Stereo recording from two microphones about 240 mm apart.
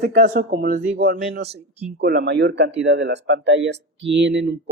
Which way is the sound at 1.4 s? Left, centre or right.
Right.